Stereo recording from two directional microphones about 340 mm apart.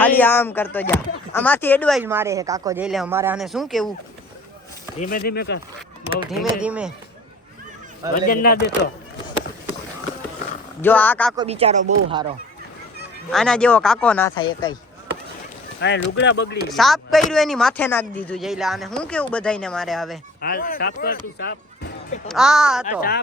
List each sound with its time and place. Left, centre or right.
0.0 s speech: centre
4.9 s speech: left
6.4 s speech: centre
8.3 s speech: left
10.8 s speech: centre
11.3 s speech: centre
13.3 s speech: centre
15.8 s speech: left
16.7 s speech: centre
20.4 s speech: left
22.3 s speech: centre
23.0 s speech: left